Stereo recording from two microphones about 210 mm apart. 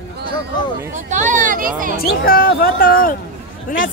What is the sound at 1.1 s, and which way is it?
Speech, 35° right (ahead or behind).